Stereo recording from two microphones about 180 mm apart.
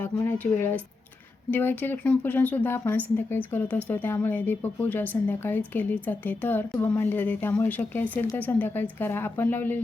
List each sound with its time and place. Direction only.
0.0 s speech: 10° left (ahead or behind)